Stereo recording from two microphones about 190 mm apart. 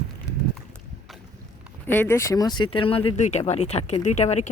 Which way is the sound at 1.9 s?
10° left (ahead or behind).